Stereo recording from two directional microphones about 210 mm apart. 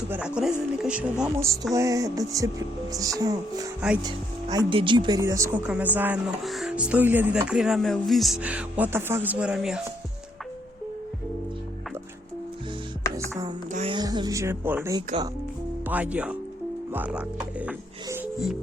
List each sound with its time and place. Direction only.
0.1 s speech: 5° right (ahead or behind)
3.8 s speech: 5° right (ahead or behind)
4.5 s speech: 25° right (ahead or behind); by 9.8 s 5° right (ahead or behind)
13.1 s music: 15° right (ahead or behind)
13.7 s speech: 25° right (ahead or behind); by 17.2 s 5° right (ahead or behind)
17.7 s music: 5° right (ahead or behind)